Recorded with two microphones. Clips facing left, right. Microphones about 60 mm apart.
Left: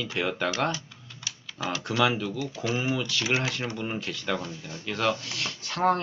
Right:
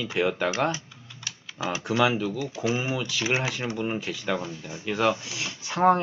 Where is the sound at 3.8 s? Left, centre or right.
Centre.